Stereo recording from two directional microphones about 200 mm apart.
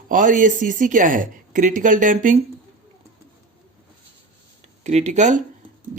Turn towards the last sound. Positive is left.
turn(degrees=-35)  # may be behind; listen again after turning